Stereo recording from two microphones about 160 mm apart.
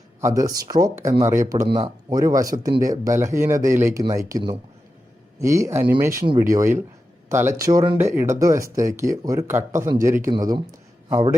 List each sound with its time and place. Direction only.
0.2 s a man's voice: 20° right (ahead or behind)